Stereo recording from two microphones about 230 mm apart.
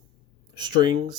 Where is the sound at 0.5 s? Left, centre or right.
Centre.